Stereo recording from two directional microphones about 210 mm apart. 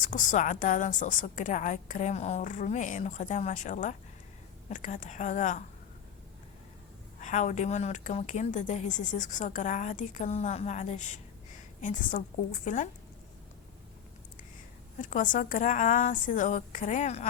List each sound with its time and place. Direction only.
0.0 s a woman's voice: 35° left (ahead or behind)
7.2 s a woman's voice: 35° left (ahead or behind)
15.0 s a woman's voice: 40° left (ahead or behind)